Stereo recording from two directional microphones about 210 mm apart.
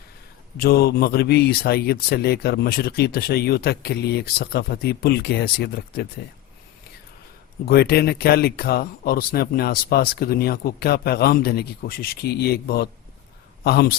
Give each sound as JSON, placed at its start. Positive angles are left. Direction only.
{"t": 0.5, "sound": "speech", "side_deg": 50}
{"t": 7.6, "sound": "speech", "side_deg": 45}